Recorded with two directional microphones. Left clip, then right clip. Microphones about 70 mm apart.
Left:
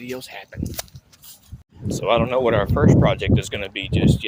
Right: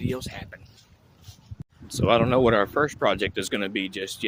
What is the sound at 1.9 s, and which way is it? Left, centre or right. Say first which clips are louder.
Speech: left 2 dB; right.